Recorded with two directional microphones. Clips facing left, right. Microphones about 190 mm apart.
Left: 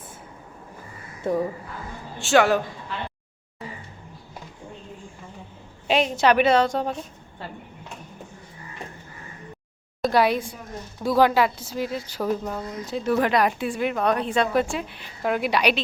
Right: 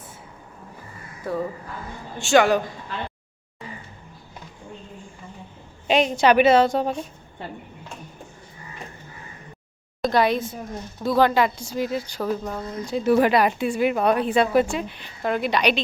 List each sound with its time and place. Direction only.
1.2 s speech: 20° left (ahead or behind)
2.1 s speech: centre (ahead or behind)
5.9 s speech: centre (ahead or behind)
10.0 s speech: 10° left (ahead or behind)
13.1 s speech: 10° right (ahead or behind); by 15.8 s 5° left (ahead or behind)